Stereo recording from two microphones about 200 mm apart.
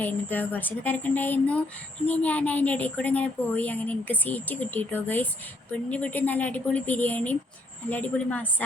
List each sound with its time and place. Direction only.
0.0 s speech: 10° left (ahead or behind)